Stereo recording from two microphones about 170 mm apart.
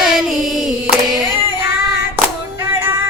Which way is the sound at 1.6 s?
75° left (ahead or behind).